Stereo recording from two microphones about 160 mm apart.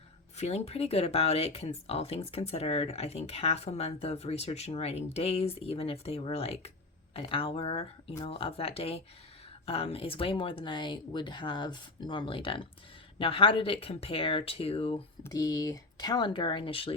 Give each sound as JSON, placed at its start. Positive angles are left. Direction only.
{"t": 0.3, "sound": "speech", "side_deg": 40}
{"t": 15.2, "sound": "speech", "side_deg": 25}